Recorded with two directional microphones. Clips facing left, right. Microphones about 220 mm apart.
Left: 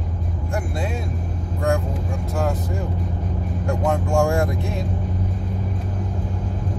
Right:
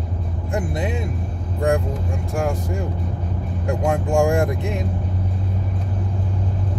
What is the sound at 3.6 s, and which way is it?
Speech, 15° right (ahead or behind).